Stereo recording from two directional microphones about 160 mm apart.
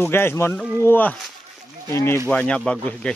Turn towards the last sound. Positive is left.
turn(degrees=5)  # may be behind; listen again after turning